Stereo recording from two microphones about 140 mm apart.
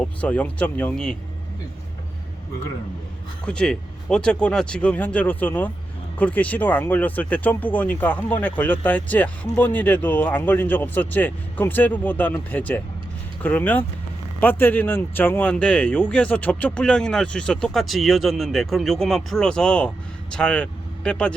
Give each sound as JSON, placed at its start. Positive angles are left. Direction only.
{"t": 0.0, "sound": "speech", "side_deg": 10}
{"t": 3.4, "sound": "speech", "side_deg": 5}